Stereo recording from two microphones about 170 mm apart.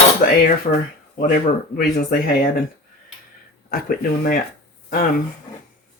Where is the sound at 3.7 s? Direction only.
60° left (ahead or behind).